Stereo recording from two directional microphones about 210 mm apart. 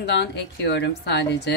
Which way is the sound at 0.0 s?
55° left (ahead or behind).